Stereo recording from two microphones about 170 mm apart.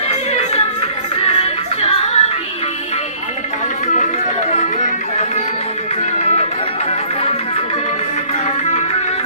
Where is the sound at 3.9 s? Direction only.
45° left (ahead or behind).